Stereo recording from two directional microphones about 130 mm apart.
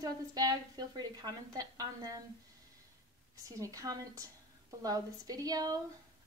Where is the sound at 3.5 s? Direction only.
25° right (ahead or behind).